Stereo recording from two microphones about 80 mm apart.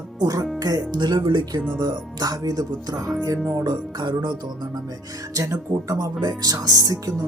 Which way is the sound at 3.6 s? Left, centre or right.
Right.